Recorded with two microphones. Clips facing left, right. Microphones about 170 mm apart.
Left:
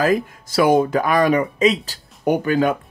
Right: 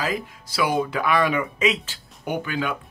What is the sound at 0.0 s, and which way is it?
Speech, 50° left (ahead or behind).